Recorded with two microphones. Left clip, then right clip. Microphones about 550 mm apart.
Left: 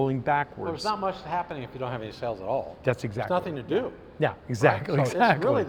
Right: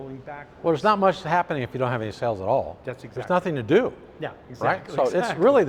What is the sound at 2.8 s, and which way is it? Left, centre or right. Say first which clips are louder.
Speech: left 7 dB; left.